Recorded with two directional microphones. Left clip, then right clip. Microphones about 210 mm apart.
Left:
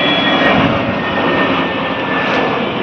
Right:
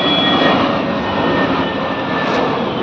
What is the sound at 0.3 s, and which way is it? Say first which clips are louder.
Vehicle: left 1 dB; 10° left (ahead or behind).